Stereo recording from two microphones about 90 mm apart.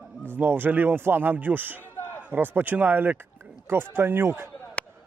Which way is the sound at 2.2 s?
20° right (ahead or behind).